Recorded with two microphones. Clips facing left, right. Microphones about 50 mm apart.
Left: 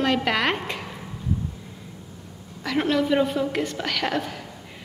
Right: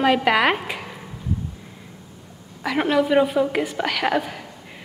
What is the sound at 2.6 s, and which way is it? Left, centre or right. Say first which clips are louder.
A woman's voice: right 3 dB; centre.